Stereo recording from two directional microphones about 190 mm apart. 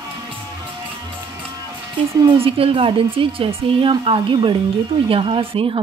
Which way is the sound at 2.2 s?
30° right (ahead or behind).